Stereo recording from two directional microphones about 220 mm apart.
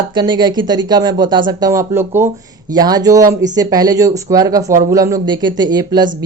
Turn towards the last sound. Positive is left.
turn(degrees=-20)  # may be behind; listen again after turning